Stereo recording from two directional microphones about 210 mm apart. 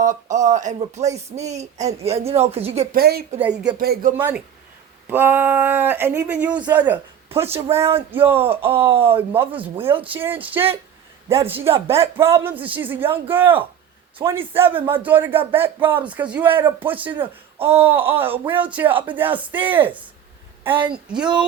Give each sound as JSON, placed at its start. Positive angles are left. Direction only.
{"t": 0.0, "sound": "speech", "side_deg": -35}
{"t": 2.0, "sound": "speech", "side_deg": -30}
{"t": 2.9, "sound": "a woman's voice", "side_deg": -50}
{"t": 3.3, "sound": "speech", "side_deg": -10}
{"t": 3.8, "sound": "a woman's voice", "side_deg": -45}
{"t": 4.2, "sound": "speech", "side_deg": -10}
{"t": 8.6, "sound": "speech", "side_deg": -25}
{"t": 9.0, "sound": "speech", "side_deg": -10}
{"t": 9.8, "sound": "speech", "side_deg": -25}
{"t": 10.1, "sound": "speech", "side_deg": -10}